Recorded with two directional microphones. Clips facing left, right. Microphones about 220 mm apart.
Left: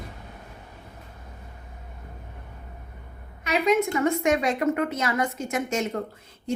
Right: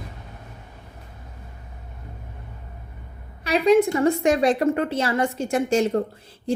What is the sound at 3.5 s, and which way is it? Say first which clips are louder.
A woman's voice: right 5 dB; 30° right (ahead or behind).